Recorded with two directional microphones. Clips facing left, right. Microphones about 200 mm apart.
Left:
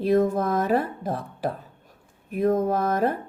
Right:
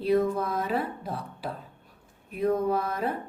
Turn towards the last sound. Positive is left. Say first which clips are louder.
# left 5 dB
turn(degrees=45)  # may be behind; listen again after turning